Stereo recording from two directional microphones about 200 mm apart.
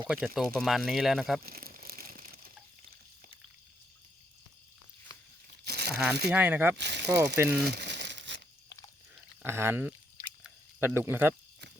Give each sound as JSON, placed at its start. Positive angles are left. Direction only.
{"t": 0.1, "sound": "speech", "side_deg": 0}
{"t": 1.5, "sound": "a sound", "side_deg": -50}
{"t": 5.6, "sound": "crumpling", "side_deg": -55}
{"t": 5.9, "sound": "speech", "side_deg": -5}
{"t": 6.7, "sound": "speech", "side_deg": -60}
{"t": 7.3, "sound": "speech", "side_deg": -10}
{"t": 7.7, "sound": "crumpling", "side_deg": -55}
{"t": 9.4, "sound": "speech", "side_deg": -10}